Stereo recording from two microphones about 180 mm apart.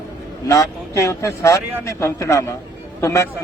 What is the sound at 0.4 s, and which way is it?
Speech, 15° left (ahead or behind).